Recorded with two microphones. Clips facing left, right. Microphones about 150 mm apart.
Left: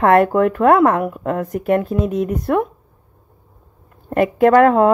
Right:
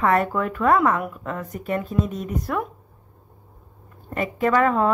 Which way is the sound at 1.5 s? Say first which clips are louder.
Left 9 dB; 70° left (ahead or behind).